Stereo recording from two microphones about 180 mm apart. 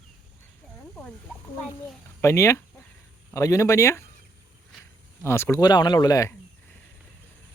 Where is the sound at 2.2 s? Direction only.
15° left (ahead or behind).